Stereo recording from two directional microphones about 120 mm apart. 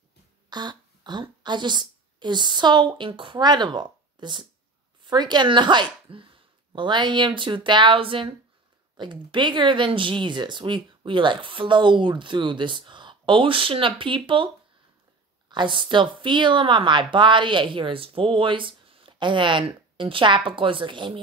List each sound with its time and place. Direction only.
0.5 s a woman's voice: 35° right (ahead or behind)
15.5 s speech: 40° right (ahead or behind)